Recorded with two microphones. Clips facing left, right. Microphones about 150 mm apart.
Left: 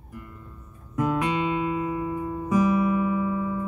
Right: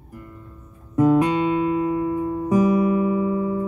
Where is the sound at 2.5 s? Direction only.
35° right (ahead or behind).